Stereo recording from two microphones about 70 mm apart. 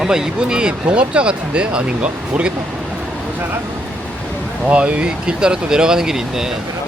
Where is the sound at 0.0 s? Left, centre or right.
Centre; by 3.6 s right.